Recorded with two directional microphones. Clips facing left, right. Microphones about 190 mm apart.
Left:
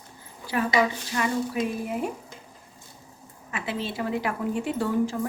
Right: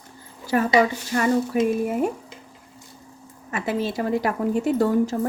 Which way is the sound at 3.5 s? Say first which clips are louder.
Right 6 dB; 40° right (ahead or behind).